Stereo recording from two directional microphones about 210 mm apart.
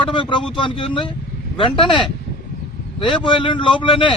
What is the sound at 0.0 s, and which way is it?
A man's voice, 25° left (ahead or behind).